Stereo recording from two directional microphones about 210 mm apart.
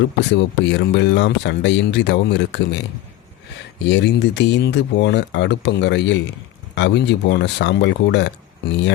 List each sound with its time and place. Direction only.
0.3 s speech: 55° left (ahead or behind)
3.8 s speech: 55° left (ahead or behind)